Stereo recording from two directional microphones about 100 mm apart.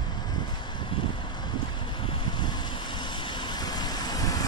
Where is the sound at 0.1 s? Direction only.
45° left (ahead or behind).